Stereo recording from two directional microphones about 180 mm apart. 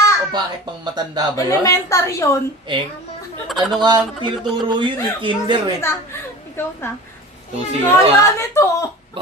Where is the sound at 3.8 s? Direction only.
25° right (ahead or behind).